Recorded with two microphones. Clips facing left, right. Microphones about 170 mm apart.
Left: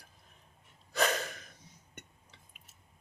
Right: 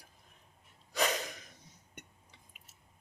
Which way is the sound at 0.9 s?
15° right (ahead or behind).